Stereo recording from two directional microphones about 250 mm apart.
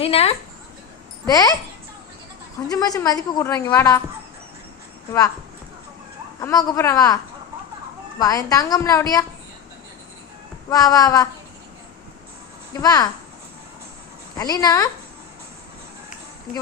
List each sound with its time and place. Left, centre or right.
0.0 s a woman's voice: left
2.6 s a woman's voice: centre
6.4 s a woman's voice: centre
8.2 s a woman's voice: centre
10.7 s a woman's voice: centre
12.7 s a woman's voice: centre
14.3 s a woman's voice: centre